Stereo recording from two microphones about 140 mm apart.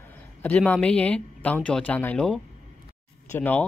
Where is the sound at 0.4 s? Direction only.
10° left (ahead or behind).